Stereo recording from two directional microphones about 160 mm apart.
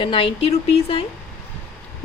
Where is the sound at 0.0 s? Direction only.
35° left (ahead or behind).